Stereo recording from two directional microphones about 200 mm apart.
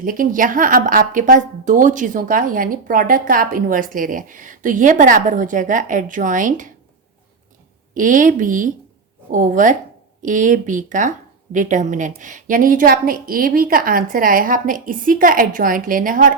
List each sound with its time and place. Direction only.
0.0 s a woman's voice: 45° right (ahead or behind)
7.9 s a woman's voice: 40° right (ahead or behind)